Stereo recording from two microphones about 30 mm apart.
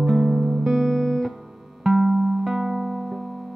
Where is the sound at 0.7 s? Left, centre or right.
Centre.